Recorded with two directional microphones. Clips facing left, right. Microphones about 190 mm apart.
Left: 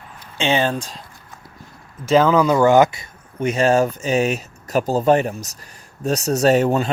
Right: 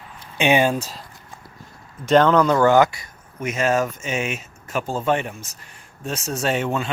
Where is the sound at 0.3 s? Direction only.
15° right (ahead or behind).